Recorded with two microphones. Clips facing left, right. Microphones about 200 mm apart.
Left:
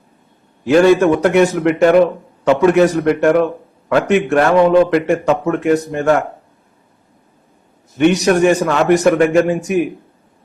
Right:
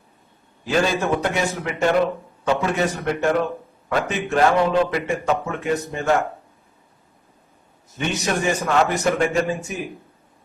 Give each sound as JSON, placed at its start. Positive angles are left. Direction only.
{"t": 0.6, "sound": "a man's voice", "side_deg": 70}
{"t": 7.9, "sound": "a man's voice", "side_deg": 70}